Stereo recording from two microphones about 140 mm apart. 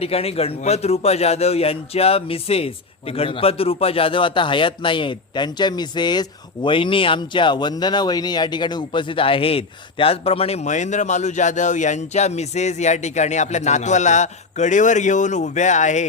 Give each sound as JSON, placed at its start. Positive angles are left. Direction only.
{"t": 0.0, "sound": "a man's voice", "side_deg": 45}